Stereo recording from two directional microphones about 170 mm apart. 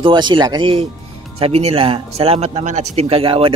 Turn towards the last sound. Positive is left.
turn(degrees=-35)  # may be behind; listen again after turning